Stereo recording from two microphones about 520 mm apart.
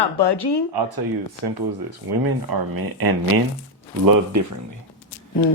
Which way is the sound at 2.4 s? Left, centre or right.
Right.